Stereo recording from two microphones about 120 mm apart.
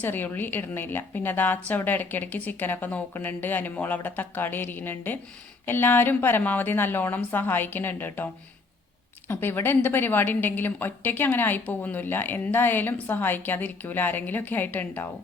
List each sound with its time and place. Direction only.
0.0 s a woman's voice: 15° left (ahead or behind)